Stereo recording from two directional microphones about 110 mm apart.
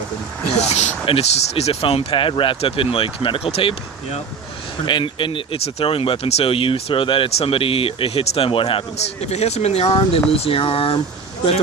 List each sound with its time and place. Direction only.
0.6 s a sound: 80° left
1.0 s speech: 65° left (ahead or behind)
4.9 s speech: 50° left (ahead or behind)
9.3 s speech: 80° left; by 11.0 s 55° left (ahead or behind)